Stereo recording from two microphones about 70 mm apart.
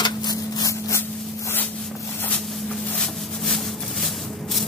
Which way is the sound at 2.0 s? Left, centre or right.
Left.